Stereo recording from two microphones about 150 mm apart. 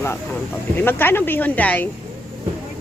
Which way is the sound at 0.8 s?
15° left (ahead or behind).